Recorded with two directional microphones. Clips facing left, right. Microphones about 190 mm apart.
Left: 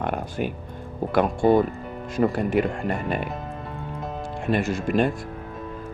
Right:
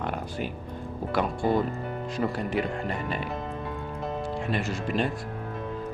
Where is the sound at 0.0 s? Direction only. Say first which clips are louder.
Left 5 dB; 55° left (ahead or behind).